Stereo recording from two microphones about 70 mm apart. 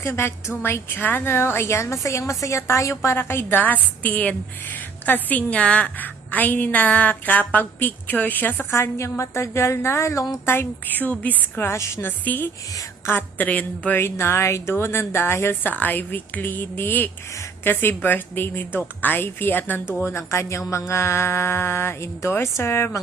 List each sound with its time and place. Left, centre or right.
0.0 s speech: left
3.6 s a woman's voice: left
8.7 s a woman's voice: left
11.7 s a woman's voice: left
14.0 s a woman's voice: left